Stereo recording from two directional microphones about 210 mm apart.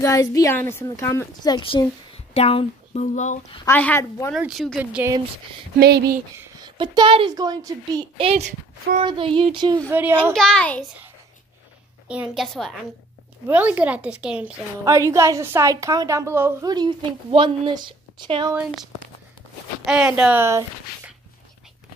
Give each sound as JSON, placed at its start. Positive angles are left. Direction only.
{"t": 0.0, "sound": "a woman's voice", "side_deg": 15}
{"t": 3.6, "sound": "a woman's voice", "side_deg": 10}
{"t": 4.3, "sound": "speech", "side_deg": 0}
{"t": 5.8, "sound": "speech", "side_deg": -50}
{"t": 6.3, "sound": "a sound", "side_deg": -10}
{"t": 6.8, "sound": "speech", "side_deg": -20}
{"t": 10.3, "sound": "speech", "side_deg": 5}
{"t": 12.1, "sound": "a woman's voice", "side_deg": -5}
{"t": 19.9, "sound": "a woman's voice", "side_deg": -5}